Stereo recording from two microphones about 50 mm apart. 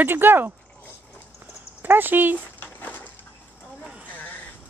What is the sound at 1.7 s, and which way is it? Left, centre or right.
Speech, right.